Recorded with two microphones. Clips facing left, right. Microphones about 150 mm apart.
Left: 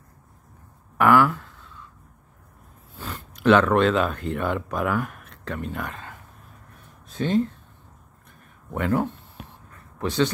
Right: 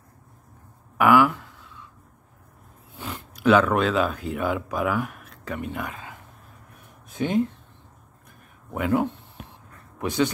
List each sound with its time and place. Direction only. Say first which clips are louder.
0.9 s a sound: even; 10° right (ahead or behind)
3.4 s speech: left 1 dB; 5° right (ahead or behind)
8.7 s speech: right 1 dB; 10° right (ahead or behind)